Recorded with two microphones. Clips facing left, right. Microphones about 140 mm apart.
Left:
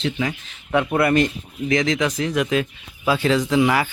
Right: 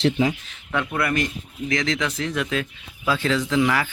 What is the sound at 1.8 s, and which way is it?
Speech, 15° left (ahead or behind).